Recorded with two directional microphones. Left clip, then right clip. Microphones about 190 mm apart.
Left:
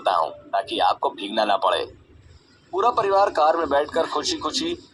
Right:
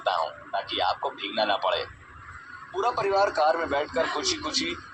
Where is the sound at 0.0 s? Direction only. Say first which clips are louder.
Left 5 dB; 50° left (ahead or behind).